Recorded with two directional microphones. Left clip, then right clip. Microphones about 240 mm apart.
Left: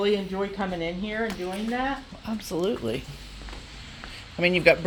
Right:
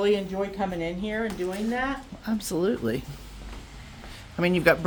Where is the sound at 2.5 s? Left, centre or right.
Right.